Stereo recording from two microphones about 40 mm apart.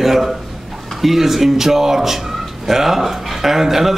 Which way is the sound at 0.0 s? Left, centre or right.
Centre.